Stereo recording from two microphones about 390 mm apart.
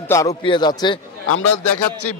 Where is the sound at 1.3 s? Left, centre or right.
Left.